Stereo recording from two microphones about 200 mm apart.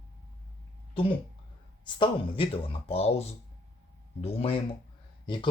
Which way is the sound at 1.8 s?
25° left (ahead or behind).